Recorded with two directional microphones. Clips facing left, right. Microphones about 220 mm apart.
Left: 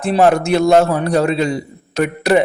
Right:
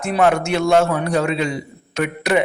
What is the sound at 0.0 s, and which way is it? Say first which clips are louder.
A man's voice: left 4 dB; 35° left (ahead or behind).